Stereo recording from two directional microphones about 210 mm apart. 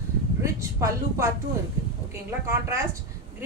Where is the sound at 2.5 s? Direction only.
15° right (ahead or behind).